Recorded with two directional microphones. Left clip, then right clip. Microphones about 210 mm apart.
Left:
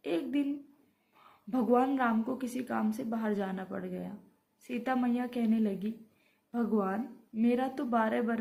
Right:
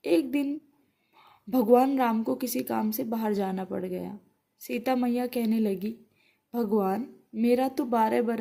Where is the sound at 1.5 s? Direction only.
45° right (ahead or behind).